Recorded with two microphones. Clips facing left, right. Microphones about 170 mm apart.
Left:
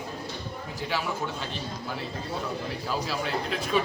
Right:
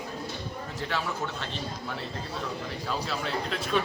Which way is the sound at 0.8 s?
5° left (ahead or behind).